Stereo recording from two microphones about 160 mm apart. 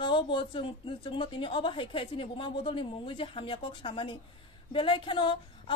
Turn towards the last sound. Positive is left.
turn(degrees=30)  # may be behind; listen again after turning